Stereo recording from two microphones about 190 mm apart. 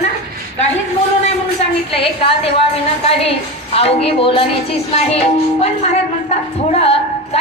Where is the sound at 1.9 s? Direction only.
30° left (ahead or behind).